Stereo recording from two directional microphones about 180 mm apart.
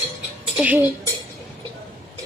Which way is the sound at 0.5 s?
10° right (ahead or behind).